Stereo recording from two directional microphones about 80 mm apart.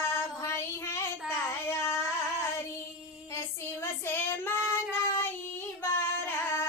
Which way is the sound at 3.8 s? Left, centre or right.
Left.